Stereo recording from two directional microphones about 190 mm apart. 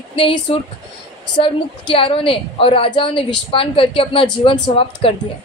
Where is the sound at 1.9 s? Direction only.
30° left (ahead or behind).